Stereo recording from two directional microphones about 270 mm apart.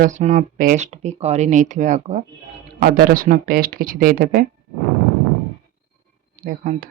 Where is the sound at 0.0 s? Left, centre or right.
Right.